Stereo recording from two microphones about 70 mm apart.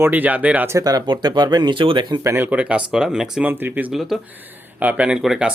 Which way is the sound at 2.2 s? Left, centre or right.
Right.